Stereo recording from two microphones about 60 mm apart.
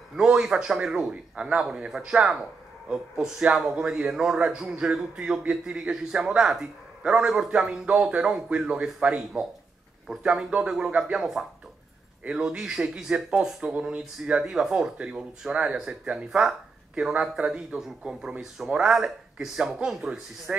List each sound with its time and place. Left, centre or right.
0.1 s speech: centre
7.8 s speech: right
8.8 s speech: centre
16.9 s speech: centre